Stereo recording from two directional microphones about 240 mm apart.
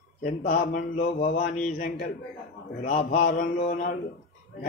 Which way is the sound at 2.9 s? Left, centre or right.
Left.